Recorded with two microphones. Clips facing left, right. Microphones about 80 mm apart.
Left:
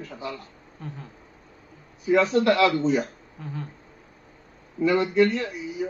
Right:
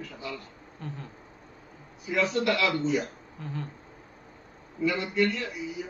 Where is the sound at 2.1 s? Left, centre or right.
Left.